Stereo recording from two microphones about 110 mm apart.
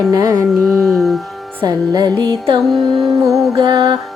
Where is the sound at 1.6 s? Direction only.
40° right (ahead or behind).